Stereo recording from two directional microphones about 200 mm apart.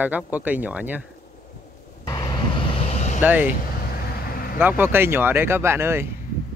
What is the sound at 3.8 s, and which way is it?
Vehicle, 50° left (ahead or behind).